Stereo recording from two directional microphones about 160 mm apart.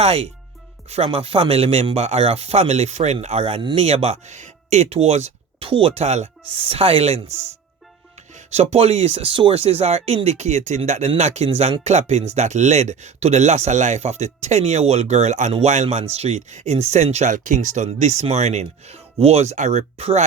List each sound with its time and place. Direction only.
0.0 s speech: 40° right (ahead or behind)
8.4 s speech: 40° right (ahead or behind)